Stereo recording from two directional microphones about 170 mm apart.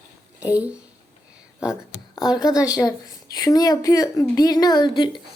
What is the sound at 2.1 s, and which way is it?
A woman's voice, 25° left (ahead or behind).